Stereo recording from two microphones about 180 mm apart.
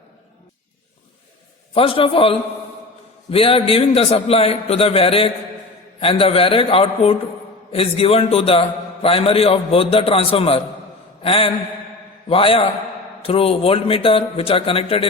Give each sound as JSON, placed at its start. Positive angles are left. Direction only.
{"t": 1.7, "sound": "a man's voice", "side_deg": 30}